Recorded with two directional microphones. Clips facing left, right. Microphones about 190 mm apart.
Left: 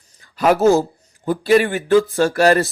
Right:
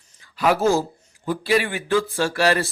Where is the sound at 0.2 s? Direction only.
45° left (ahead or behind).